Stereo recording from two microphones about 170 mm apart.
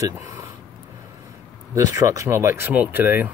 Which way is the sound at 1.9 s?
20° right (ahead or behind).